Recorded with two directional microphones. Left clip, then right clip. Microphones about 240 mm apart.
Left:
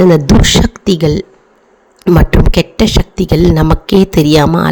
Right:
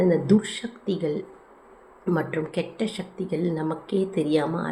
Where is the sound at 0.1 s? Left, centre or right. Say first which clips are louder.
Left 14 dB; left.